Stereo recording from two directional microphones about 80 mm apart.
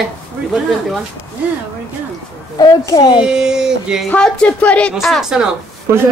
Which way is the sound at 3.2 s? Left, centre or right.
Centre.